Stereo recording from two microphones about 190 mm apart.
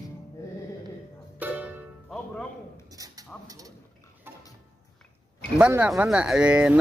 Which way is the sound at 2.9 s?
20° right (ahead or behind).